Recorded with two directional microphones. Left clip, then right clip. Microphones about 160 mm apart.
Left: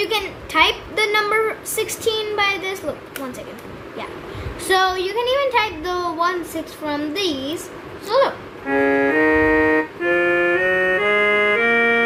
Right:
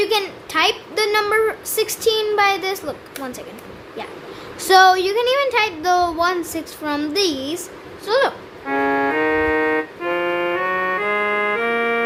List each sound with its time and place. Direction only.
0.0 s a child's voice: 40° right (ahead or behind)
4.7 s speech: 45° right (ahead or behind)
8.0 s music: 45° right (ahead or behind)
9.2 s organ: 15° left (ahead or behind)
10.0 s music: 35° right (ahead or behind)